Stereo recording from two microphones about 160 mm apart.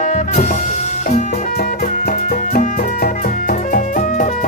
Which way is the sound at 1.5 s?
60° left (ahead or behind).